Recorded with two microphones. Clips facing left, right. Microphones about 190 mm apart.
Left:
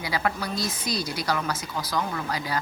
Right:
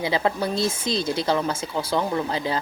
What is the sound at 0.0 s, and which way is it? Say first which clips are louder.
Speech: right 5 dB; 25° right (ahead or behind).